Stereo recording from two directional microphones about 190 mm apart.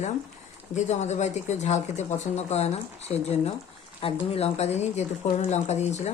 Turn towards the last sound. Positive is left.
turn(degrees=35)  # may be behind; listen again after turning